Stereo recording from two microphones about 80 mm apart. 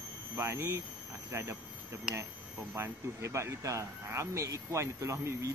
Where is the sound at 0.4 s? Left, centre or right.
Right.